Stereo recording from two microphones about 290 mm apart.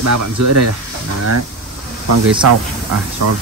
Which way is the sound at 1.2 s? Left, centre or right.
Right.